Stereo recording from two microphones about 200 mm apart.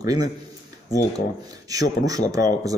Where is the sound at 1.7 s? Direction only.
15° right (ahead or behind).